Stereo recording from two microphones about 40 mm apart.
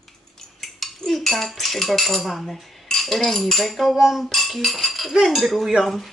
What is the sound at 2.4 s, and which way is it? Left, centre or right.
Cutlery, centre.